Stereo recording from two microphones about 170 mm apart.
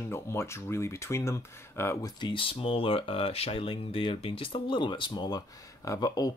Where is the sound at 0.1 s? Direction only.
15° left (ahead or behind).